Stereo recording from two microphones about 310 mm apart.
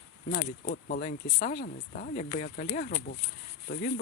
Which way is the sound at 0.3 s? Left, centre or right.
Left.